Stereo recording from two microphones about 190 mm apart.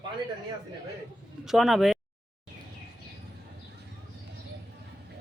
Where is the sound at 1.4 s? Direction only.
Centre (ahead or behind).